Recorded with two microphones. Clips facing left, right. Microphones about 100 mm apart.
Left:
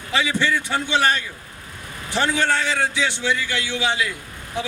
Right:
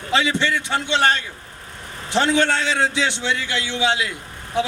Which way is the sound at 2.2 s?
70° right (ahead or behind).